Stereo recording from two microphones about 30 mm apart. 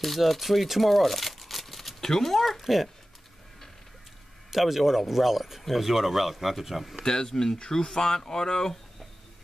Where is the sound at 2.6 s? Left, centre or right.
Centre.